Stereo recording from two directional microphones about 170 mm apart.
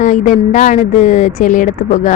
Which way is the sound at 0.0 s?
50° left (ahead or behind).